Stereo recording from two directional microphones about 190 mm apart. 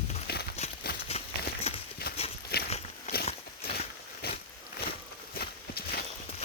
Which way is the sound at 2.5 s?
55° left (ahead or behind).